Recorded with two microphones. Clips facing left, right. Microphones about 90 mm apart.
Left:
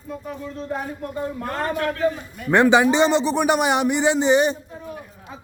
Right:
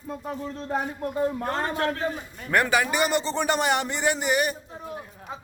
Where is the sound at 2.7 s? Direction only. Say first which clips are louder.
Left 7 dB; 25° left (ahead or behind).